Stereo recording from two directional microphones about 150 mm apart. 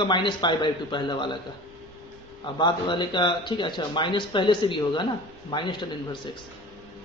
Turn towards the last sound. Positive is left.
turn(degrees=30)  # may be behind; listen again after turning